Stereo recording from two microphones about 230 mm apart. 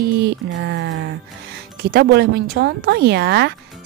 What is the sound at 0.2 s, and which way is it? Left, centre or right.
Speech, right.